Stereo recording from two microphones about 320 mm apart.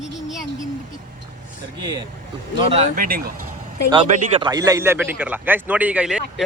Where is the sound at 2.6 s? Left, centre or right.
Centre.